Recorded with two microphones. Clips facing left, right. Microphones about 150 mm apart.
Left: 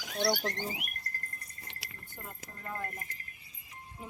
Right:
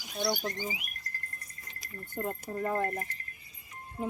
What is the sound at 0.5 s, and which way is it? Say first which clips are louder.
Speech: right 1 dB; 60° left (ahead or behind).